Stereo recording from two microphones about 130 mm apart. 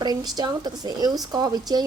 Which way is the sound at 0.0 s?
30° right (ahead or behind).